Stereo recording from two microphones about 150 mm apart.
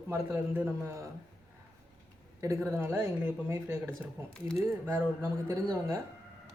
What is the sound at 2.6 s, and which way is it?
Speech, 15° right (ahead or behind).